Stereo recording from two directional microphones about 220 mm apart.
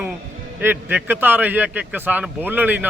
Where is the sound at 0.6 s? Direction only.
10° right (ahead or behind).